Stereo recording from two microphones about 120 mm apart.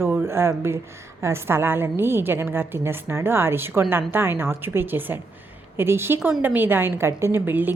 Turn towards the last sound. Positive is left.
turn(degrees=-15)  # may be behind; listen again after turning